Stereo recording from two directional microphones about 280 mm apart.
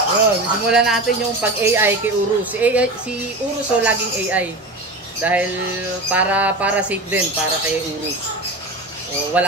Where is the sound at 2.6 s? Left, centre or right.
Centre.